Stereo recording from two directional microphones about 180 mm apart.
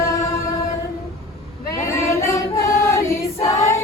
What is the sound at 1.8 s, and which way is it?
Choir, 15° left (ahead or behind).